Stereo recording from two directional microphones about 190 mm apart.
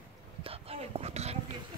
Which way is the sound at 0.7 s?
35° right (ahead or behind).